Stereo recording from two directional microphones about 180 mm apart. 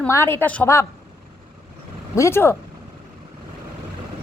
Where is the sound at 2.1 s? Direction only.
15° left (ahead or behind).